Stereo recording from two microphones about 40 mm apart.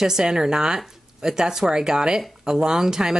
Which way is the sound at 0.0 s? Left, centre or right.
Centre.